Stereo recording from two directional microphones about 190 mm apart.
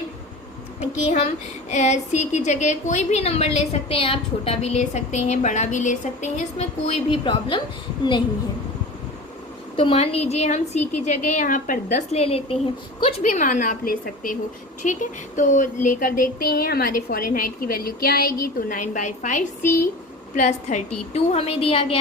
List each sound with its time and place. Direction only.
0.8 s a woman's voice: 35° left (ahead or behind)
9.7 s a woman's voice: 30° left (ahead or behind)